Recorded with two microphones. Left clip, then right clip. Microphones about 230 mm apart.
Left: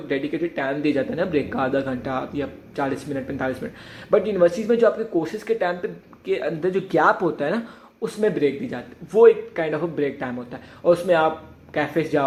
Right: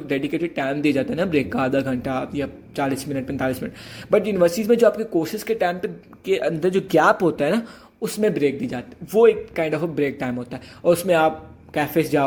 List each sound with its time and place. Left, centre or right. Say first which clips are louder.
0.1 s a man's voice: right 1 dB; right